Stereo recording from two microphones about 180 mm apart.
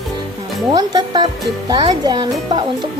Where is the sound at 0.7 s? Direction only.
25° right (ahead or behind).